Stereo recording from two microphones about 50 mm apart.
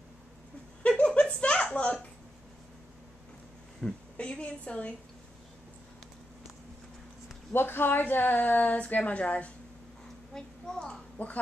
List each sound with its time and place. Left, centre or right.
0.8 s a sound: left
3.8 s a woman's voice: centre
4.2 s a woman's voice: left
7.5 s speech: left
10.3 s a sound: centre
11.2 s a woman's voice: left